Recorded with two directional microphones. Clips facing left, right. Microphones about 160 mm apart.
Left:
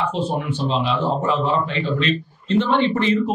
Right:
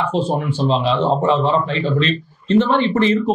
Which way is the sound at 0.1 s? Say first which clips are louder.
Right 4 dB; 30° right (ahead or behind).